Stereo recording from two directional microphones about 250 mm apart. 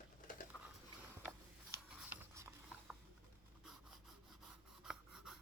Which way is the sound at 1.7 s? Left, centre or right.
Centre.